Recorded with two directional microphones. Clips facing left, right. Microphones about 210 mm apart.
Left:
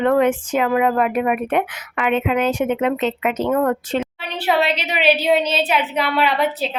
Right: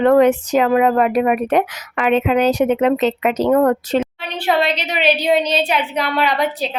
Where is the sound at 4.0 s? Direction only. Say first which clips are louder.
Right 2 dB; 10° left (ahead or behind).